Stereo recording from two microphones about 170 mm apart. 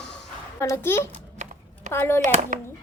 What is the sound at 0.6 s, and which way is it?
A woman's voice, 15° left (ahead or behind).